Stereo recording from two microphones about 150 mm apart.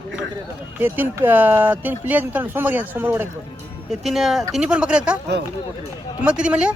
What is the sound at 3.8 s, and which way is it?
Speech, centre (ahead or behind).